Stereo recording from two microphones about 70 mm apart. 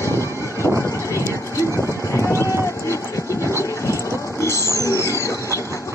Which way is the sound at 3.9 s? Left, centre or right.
Left.